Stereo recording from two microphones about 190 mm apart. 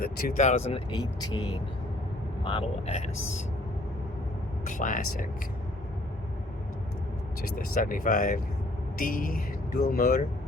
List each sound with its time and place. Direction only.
0.0 s speech: 50° left (ahead or behind); by 3.0 s 30° left (ahead or behind)
4.6 s speech: 45° left (ahead or behind)
7.8 s speech: 45° left (ahead or behind)